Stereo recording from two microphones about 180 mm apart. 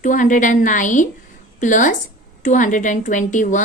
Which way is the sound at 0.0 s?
45° left (ahead or behind).